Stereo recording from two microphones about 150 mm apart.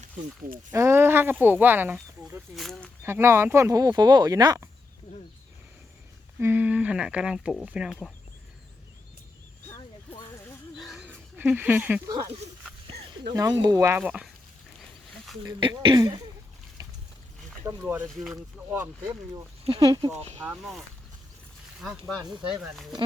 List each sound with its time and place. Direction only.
0.7 s speech: 20° right (ahead or behind)
2.6 s speech: 5° left (ahead or behind)
3.0 s speech: 15° right (ahead or behind)
6.4 s speech: 10° right (ahead or behind)
10.8 s dog: centre (ahead or behind)
11.0 s a sound: 10° right (ahead or behind)
12.0 s speech: 25° right (ahead or behind)
13.3 s speech: 25° right (ahead or behind); by 14.3 s 10° right (ahead or behind)
15.4 s speech: 30° right (ahead or behind)
16.8 s boat: 25° right (ahead or behind)
17.7 s speech: 10° right (ahead or behind)
19.8 s speech: 25° right (ahead or behind)
20.1 s speech: 45° right (ahead or behind)
21.8 s speech: centre (ahead or behind)